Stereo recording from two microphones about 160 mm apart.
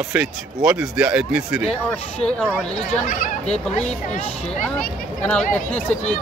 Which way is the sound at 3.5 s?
45° left (ahead or behind).